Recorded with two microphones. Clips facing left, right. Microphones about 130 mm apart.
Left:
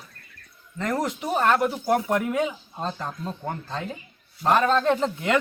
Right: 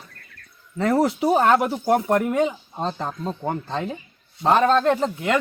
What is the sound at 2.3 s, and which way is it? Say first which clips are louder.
Speech: right 4 dB; 25° right (ahead or behind).